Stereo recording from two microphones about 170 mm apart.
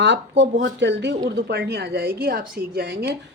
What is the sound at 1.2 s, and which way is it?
A woman's voice, 75° right (ahead or behind).